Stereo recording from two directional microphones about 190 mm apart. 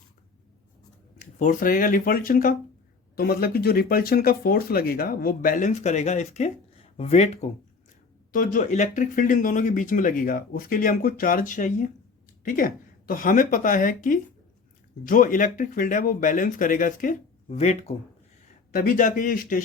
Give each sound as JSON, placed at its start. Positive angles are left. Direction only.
{"t": 1.2, "sound": "speech", "side_deg": 40}
{"t": 18.7, "sound": "speech", "side_deg": 50}